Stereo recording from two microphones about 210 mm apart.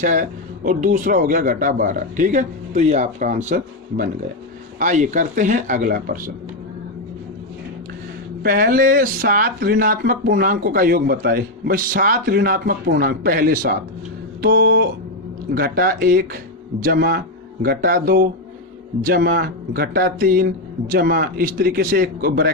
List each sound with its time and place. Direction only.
0.0 s a man's voice: 35° right (ahead or behind)
8.4 s speech: 40° right (ahead or behind)
14.4 s speech: 55° right (ahead or behind)